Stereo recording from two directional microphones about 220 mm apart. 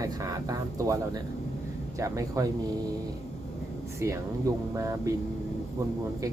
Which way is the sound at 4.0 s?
15° right (ahead or behind).